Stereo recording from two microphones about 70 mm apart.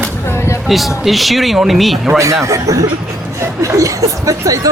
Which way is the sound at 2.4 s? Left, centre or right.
Right.